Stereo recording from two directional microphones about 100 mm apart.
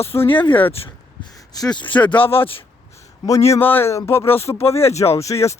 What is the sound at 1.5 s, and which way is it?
Speech, 45° left (ahead or behind).